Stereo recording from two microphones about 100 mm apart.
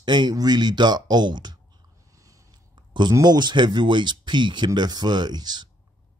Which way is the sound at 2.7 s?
45° right (ahead or behind).